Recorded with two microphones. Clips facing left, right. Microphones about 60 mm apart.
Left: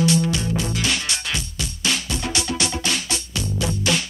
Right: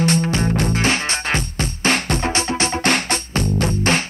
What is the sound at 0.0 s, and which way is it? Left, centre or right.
Music, right.